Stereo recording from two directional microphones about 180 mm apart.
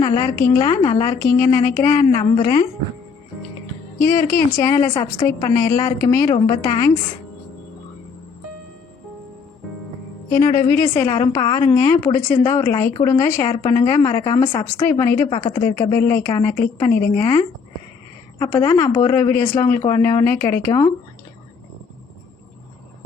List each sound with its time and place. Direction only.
0.0 s a woman's voice: 20° left (ahead or behind)
3.9 s a woman's voice: 15° left (ahead or behind)
10.3 s a woman's voice: 20° left (ahead or behind)